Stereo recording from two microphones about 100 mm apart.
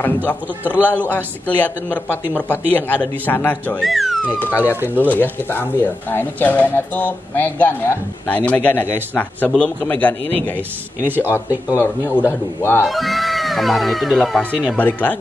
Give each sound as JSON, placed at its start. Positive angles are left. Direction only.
{"t": 0.0, "sound": "speech", "side_deg": 15}
{"t": 3.8, "sound": "speech", "side_deg": 0}
{"t": 4.4, "sound": "speech", "side_deg": 20}
{"t": 11.0, "sound": "speech", "side_deg": -20}
{"t": 11.3, "sound": "speech", "side_deg": 20}
{"t": 12.8, "sound": "speech", "side_deg": 0}
{"t": 14.8, "sound": "speech", "side_deg": 15}